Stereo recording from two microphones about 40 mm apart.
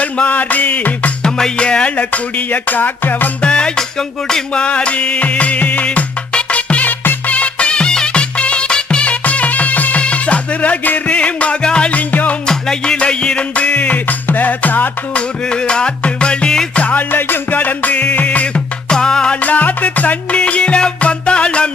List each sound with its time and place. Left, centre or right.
0.0 s music: left
1.2 s music: centre; by 3.2 s left
3.4 s music: left
4.6 s music: left
9.2 s music: left
11.0 s music: left
11.9 s music: left
12.5 s music: centre; by 13.9 s left
13.9 s music: left
15.1 s music: left
16.7 s music: left
17.5 s music: left; by 19.4 s centre
19.4 s music: left
20.3 s music: left